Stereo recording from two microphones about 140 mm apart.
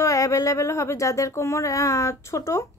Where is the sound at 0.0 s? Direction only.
25° left (ahead or behind).